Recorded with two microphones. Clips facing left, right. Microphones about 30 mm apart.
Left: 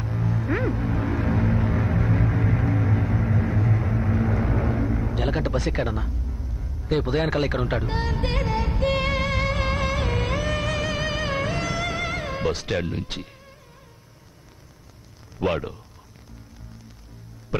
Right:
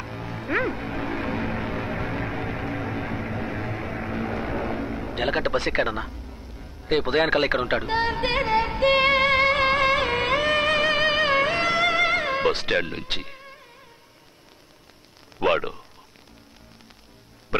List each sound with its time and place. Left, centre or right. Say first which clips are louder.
0.0 s music: left 5 dB; right
5.1 s speech: right 6 dB; right
6.5 s a sound: left 4 dB; centre
6.9 s speech: right 2 dB; right
7.5 s music: right 3 dB; right
15.3 s speech: right 3 dB; right